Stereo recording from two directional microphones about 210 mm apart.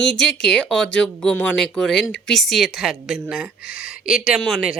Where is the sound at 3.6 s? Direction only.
45° left (ahead or behind).